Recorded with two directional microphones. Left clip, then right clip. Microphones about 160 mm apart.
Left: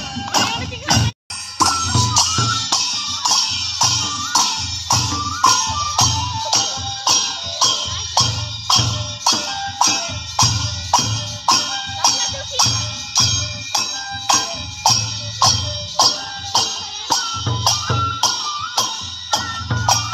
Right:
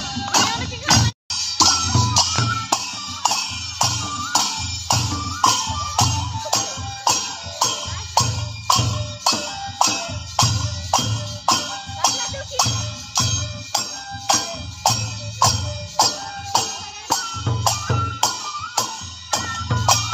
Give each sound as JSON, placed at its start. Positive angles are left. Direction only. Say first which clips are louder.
{"t": 1.6, "sound": "music", "louder": "left 1 dB", "side_deg": -55}
{"t": 6.5, "sound": "music", "louder": "left 3 dB", "side_deg": -35}